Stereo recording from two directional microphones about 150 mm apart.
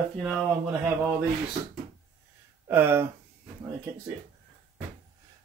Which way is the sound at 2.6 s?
15° right (ahead or behind).